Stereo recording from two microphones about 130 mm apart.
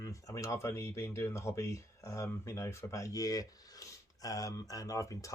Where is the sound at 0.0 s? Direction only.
25° left (ahead or behind).